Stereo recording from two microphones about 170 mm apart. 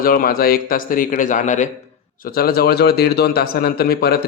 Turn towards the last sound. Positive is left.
turn(degrees=65)  # may be behind; listen again after turning